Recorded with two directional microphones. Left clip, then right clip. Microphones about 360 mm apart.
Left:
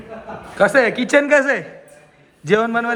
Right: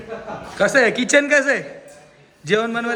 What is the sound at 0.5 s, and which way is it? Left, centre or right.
Speech, centre.